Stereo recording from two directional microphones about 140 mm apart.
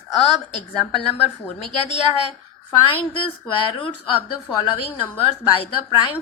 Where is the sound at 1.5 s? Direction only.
50° left (ahead or behind).